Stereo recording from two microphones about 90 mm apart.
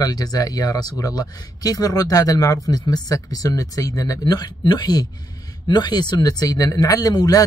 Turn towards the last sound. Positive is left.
turn(degrees=45)  # may be behind; listen again after turning